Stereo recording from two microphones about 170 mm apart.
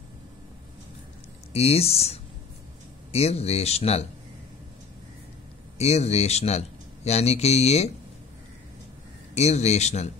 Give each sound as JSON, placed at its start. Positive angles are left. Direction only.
{"t": 1.5, "sound": "speech", "side_deg": 35}
{"t": 5.8, "sound": "speech", "side_deg": 40}
{"t": 9.3, "sound": "speech", "side_deg": 40}